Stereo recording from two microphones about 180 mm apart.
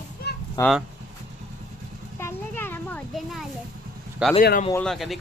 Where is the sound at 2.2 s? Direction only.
15° left (ahead or behind).